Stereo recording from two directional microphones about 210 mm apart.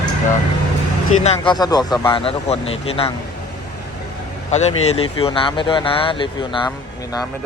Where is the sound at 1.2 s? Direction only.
25° left (ahead or behind).